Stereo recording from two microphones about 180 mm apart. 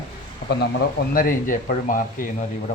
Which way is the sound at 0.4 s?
65° left (ahead or behind).